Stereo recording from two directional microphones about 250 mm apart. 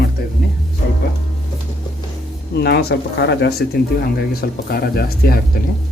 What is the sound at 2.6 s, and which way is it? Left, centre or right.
Speech, left.